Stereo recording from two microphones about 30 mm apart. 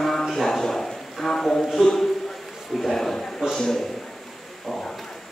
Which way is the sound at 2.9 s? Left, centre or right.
Centre.